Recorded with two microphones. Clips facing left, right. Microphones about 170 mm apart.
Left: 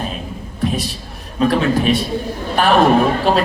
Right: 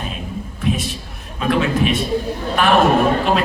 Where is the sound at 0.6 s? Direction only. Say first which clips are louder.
Left 1 dB; 35° left (ahead or behind).